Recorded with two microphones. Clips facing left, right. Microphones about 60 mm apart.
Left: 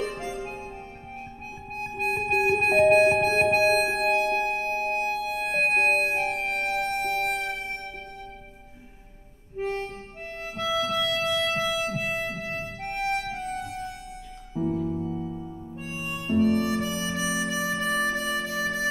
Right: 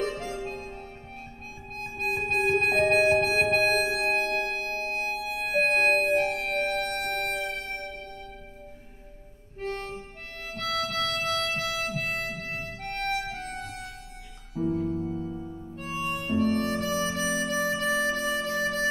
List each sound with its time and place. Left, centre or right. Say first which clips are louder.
0.0 s music: even; centre
2.0 s music: left 2 dB; centre
5.1 s music: left 1 dB; centre
9.6 s harmonica: left 4 dB; centre
10.5 s music: left 3 dB; centre
14.6 s music: left 1 dB; centre
15.0 s music: left 1 dB; centre
16.1 s harmonica: left 3 dB; centre